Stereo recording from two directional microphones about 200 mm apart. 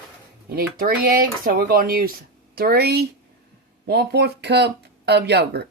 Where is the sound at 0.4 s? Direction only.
45° right (ahead or behind).